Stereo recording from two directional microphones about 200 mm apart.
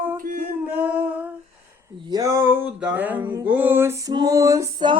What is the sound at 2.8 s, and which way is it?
Music, 10° right (ahead or behind).